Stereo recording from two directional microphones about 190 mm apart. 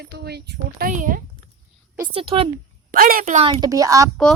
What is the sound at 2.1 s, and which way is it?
Speech, 30° right (ahead or behind).